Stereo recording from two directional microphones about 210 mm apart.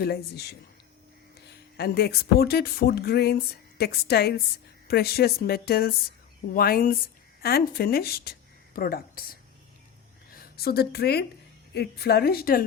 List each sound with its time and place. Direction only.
0.0 s speech: 50° left (ahead or behind)
1.7 s a woman's voice: 50° left (ahead or behind)